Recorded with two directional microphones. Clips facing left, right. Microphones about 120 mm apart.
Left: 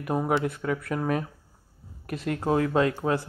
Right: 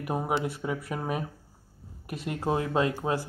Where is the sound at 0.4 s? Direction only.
15° right (ahead or behind).